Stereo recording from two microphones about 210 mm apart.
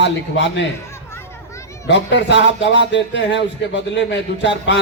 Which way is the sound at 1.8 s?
55° left (ahead or behind).